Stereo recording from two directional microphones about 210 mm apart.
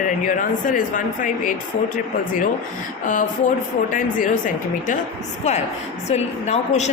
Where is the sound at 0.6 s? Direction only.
40° left (ahead or behind).